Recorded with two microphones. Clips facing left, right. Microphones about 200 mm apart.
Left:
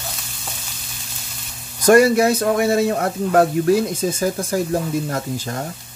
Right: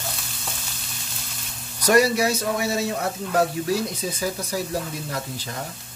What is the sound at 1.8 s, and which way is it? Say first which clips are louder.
A man's voice: left 6 dB; 50° left (ahead or behind).